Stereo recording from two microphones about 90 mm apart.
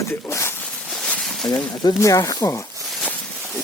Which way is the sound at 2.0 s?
40° left (ahead or behind).